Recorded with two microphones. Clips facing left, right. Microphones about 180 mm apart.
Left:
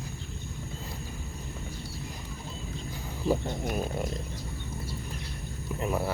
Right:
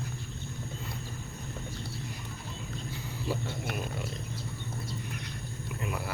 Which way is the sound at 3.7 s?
40° left (ahead or behind).